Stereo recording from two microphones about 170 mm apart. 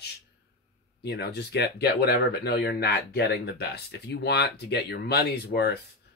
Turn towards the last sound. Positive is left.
turn(degrees=75)  # may be behind; listen again after turning